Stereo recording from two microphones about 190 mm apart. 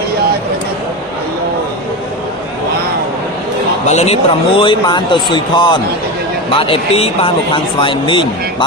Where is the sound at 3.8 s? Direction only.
35° left (ahead or behind).